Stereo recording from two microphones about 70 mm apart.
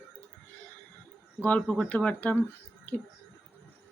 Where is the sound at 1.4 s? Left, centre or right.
Centre.